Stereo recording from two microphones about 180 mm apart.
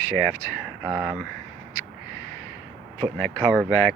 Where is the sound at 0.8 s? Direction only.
5° right (ahead or behind).